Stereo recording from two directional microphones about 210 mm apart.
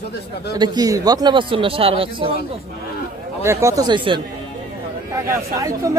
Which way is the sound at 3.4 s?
15° right (ahead or behind).